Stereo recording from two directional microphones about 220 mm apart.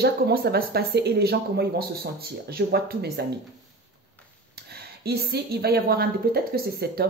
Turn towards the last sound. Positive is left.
turn(degrees=-45)  # may be behind; listen again after turning